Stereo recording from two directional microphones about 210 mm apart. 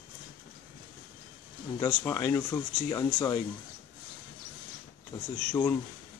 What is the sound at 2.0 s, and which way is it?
Speech, 15° left (ahead or behind).